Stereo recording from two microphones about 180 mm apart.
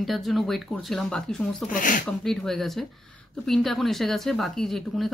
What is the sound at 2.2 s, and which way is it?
Speech, 5° left (ahead or behind).